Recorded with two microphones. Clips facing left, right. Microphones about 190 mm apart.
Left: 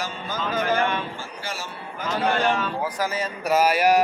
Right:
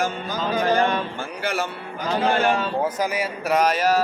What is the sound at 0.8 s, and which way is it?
Speech, 40° right (ahead or behind).